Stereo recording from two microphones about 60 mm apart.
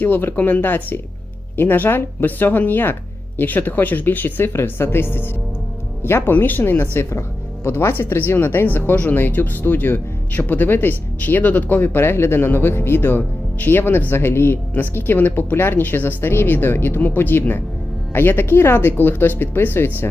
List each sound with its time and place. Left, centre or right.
0.0 s speech: left